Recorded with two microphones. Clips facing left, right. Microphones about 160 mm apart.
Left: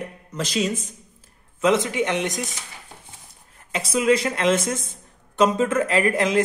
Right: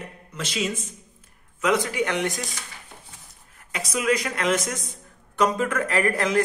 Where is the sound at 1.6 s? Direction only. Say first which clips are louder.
Left 3 dB; 25° left (ahead or behind).